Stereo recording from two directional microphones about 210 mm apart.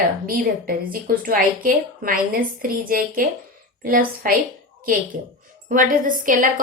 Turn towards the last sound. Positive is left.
turn(degrees=-40)  # may be behind; listen again after turning